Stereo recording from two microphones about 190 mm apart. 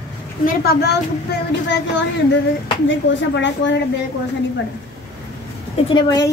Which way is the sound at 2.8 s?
70° left (ahead or behind).